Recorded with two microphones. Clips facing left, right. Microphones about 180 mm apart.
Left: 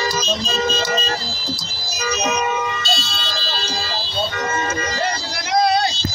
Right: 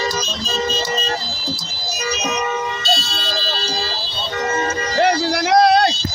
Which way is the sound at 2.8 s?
45° right (ahead or behind).